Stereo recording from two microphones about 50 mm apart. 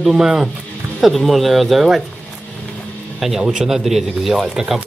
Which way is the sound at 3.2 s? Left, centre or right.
Centre.